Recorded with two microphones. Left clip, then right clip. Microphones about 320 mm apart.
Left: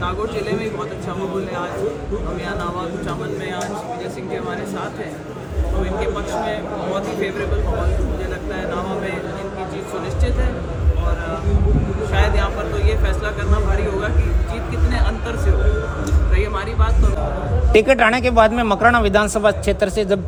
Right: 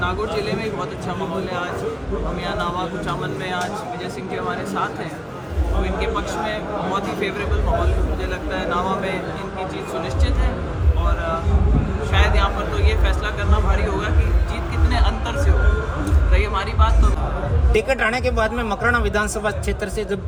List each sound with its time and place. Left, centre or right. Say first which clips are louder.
0.0 s speech: even; centre
2.6 s speech: right 1 dB; centre
5.8 s speech: left 1 dB; centre
8.5 s speech: right 3 dB; centre
12.1 s speech: right 1 dB; centre
16.4 s speech: right 2 dB; centre
17.7 s a man's voice: left 6 dB; left